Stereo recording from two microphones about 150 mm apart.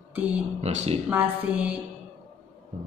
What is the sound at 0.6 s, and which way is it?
Speech, 45° right (ahead or behind).